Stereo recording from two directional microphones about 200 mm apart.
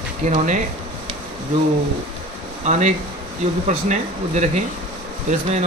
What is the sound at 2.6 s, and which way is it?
Speech, 35° right (ahead or behind).